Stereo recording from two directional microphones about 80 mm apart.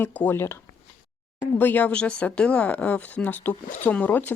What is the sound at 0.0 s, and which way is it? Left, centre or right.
Speech, left.